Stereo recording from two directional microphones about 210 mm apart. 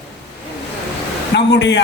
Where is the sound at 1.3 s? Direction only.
55° left (ahead or behind).